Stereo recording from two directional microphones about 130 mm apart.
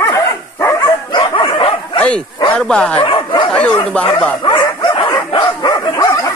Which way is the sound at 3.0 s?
40° left (ahead or behind).